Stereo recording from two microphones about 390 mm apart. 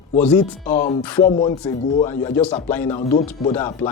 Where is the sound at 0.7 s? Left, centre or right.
Centre.